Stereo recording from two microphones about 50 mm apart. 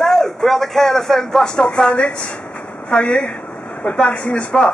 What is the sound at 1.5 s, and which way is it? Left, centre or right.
Speech, centre.